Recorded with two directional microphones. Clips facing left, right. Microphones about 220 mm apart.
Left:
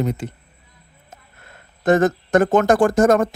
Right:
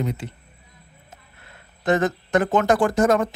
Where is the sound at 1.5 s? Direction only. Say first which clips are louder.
Left 4 dB; 45° left (ahead or behind).